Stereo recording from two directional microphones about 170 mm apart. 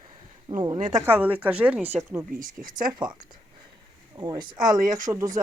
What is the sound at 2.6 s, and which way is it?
Speech, 55° right (ahead or behind).